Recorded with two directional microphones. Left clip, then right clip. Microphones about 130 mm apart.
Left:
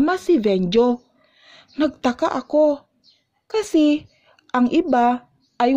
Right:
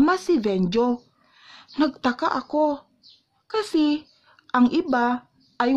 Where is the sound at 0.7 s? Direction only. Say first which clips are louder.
Left 5 dB; 25° left (ahead or behind).